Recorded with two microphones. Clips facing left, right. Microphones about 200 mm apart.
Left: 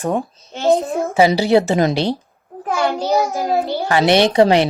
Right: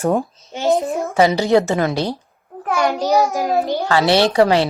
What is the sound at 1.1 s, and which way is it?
Speech, 5° left (ahead or behind).